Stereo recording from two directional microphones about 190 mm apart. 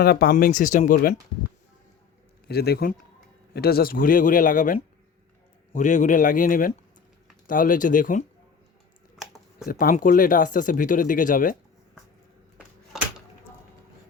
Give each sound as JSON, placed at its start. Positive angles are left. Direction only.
{"t": 0.0, "sound": "speech", "side_deg": 55}
{"t": 2.5, "sound": "a man's voice", "side_deg": 55}
{"t": 9.6, "sound": "speech", "side_deg": 50}
{"t": 12.5, "sound": "a sound", "side_deg": -5}